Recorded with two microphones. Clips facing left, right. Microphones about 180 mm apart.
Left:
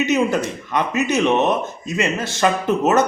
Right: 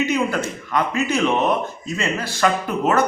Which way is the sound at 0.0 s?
20° left (ahead or behind).